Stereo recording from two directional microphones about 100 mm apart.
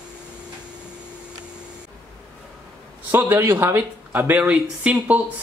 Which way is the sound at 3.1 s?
20° right (ahead or behind).